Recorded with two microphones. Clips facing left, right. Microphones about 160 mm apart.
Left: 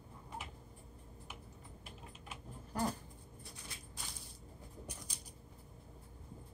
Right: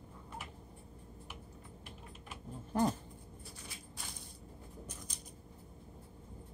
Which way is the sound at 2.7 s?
25° right (ahead or behind).